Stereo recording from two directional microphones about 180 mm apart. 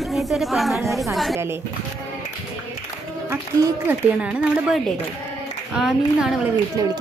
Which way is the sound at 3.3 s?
15° right (ahead or behind).